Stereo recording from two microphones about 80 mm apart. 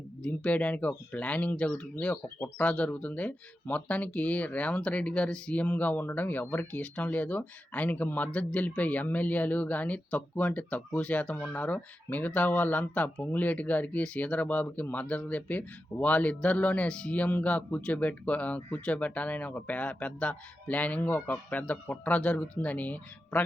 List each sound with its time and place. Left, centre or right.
0.3 s speech: centre